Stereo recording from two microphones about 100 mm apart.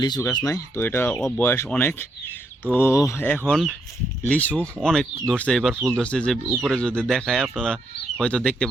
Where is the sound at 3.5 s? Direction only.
5° left (ahead or behind).